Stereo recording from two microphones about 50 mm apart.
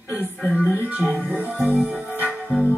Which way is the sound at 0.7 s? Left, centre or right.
Right.